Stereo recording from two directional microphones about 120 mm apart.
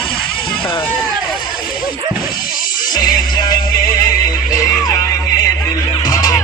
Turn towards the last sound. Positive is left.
turn(degrees=30)  # may be behind; listen again after turning